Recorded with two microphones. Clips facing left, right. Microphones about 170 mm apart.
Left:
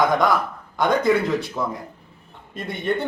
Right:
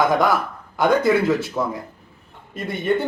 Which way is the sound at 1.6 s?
10° right (ahead or behind).